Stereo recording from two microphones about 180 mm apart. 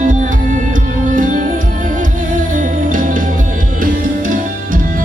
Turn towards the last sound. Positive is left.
turn(degrees=-45)  # may be behind; listen again after turning